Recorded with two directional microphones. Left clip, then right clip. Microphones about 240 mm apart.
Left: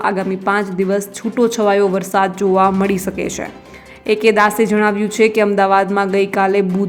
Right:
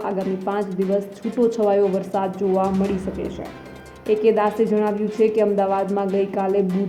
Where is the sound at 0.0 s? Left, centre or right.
Centre.